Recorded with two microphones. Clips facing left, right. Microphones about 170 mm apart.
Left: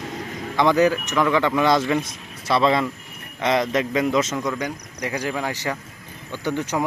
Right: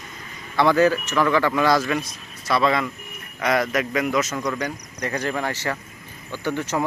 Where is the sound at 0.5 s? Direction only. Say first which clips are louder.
Even; 15° left (ahead or behind).